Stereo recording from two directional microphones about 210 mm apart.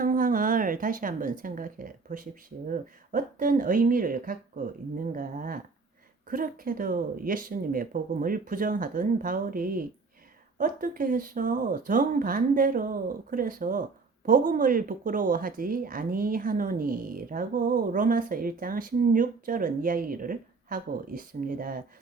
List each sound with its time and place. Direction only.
0.0 s a woman's voice: 40° right (ahead or behind)